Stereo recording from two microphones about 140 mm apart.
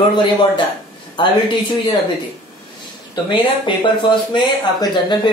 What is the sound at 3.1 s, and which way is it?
Speech, 35° left (ahead or behind).